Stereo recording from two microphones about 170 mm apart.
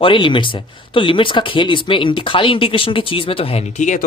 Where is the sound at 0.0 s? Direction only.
30° left (ahead or behind).